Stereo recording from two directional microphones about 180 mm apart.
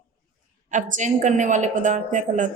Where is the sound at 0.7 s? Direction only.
45° right (ahead or behind).